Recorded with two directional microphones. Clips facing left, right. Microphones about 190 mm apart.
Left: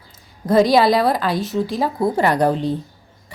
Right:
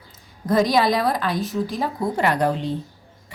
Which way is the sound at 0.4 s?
30° left (ahead or behind).